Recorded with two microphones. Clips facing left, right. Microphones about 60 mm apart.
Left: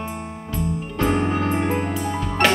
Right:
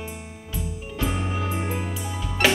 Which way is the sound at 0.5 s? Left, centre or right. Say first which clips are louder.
Left 6 dB; left.